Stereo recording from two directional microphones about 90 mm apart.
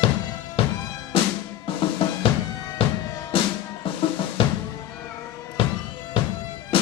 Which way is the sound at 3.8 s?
85° left.